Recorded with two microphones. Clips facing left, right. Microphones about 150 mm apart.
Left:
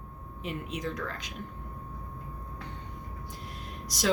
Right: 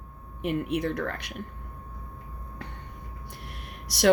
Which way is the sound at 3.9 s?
65° right (ahead or behind).